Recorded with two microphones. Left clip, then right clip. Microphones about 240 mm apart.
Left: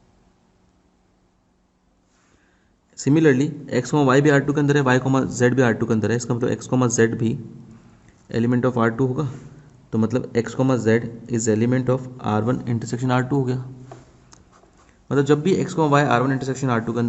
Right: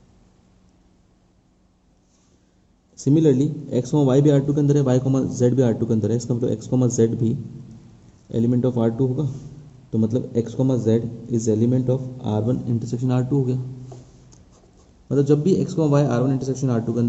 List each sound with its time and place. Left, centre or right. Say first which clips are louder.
2.9 s speech: left 1 dB; left
15.2 s speech: even; left